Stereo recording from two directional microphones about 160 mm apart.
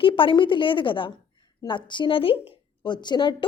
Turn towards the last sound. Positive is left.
turn(degrees=25)  # may be behind; listen again after turning